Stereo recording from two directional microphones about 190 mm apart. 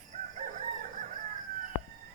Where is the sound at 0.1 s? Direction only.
40° right (ahead or behind).